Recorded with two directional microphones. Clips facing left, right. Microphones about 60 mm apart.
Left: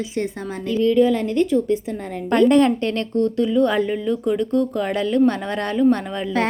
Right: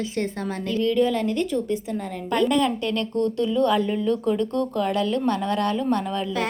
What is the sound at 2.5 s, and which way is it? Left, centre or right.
Speech, left.